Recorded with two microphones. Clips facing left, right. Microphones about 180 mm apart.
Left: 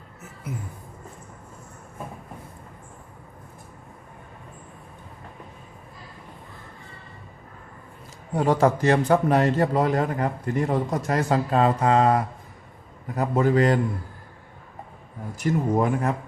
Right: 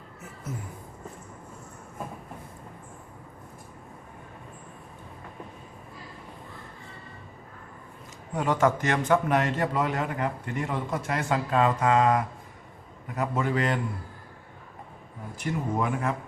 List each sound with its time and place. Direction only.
8.3 s a man's voice: 35° left (ahead or behind)
15.4 s a man's voice: 40° left (ahead or behind)